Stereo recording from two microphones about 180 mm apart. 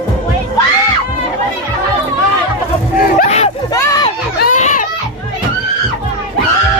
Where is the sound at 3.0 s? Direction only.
50° left (ahead or behind).